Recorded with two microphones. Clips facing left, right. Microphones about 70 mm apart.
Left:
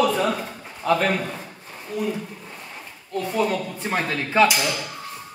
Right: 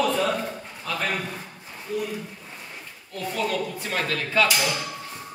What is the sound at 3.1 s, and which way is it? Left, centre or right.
Speech, centre.